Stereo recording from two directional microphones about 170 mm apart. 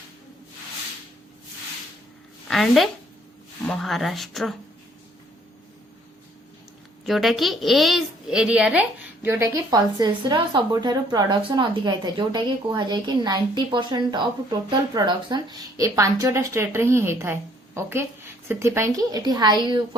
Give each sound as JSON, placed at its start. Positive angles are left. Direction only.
{"t": 2.5, "sound": "a woman's voice", "side_deg": 0}
{"t": 7.0, "sound": "speech", "side_deg": 0}